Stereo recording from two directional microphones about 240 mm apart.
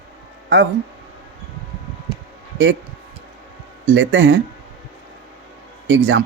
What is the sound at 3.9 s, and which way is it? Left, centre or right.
Speech, right.